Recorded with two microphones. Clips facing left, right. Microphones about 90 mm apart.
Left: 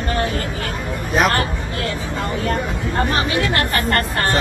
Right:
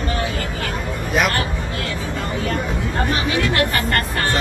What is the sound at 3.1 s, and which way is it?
Chatter, 45° left (ahead or behind).